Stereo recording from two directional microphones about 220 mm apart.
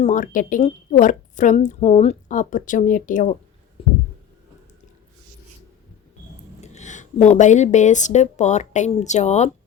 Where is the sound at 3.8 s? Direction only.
25° left (ahead or behind).